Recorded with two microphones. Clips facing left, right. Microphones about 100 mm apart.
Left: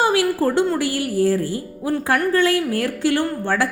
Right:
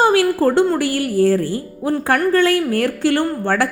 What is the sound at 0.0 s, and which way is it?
A woman's voice, 55° right (ahead or behind).